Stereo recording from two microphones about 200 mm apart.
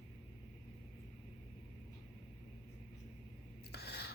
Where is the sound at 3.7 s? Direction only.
55° left (ahead or behind).